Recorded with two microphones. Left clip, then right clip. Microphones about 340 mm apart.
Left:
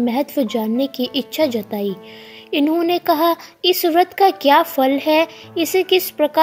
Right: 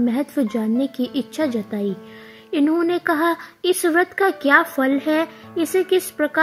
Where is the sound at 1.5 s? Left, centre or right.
Left.